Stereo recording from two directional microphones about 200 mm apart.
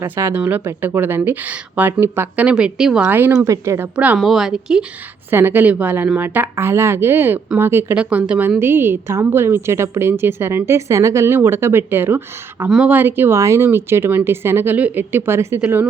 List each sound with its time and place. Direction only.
0.0 s a woman's voice: 15° right (ahead or behind)